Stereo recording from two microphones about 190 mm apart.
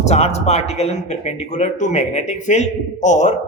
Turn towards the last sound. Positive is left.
turn(degrees=40)  # may be behind; listen again after turning